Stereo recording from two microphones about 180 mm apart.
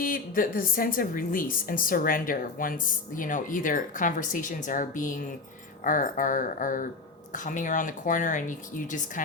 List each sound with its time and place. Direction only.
0.0 s a woman's voice: 50° left (ahead or behind)